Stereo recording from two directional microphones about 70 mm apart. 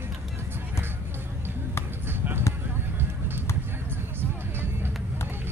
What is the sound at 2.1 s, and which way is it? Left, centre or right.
Basketball bounce, right.